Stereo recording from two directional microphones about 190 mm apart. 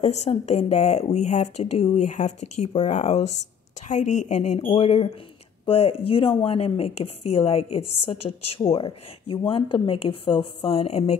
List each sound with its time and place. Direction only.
0.0 s a woman's voice: 35° left (ahead or behind)